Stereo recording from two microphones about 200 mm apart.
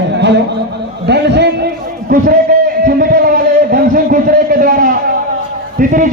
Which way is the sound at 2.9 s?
45° right (ahead or behind).